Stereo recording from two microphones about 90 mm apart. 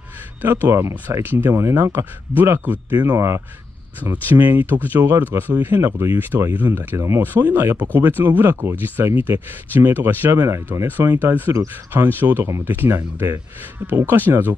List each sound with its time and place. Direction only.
0.4 s speech: 25° right (ahead or behind)
4.0 s speech: 20° right (ahead or behind)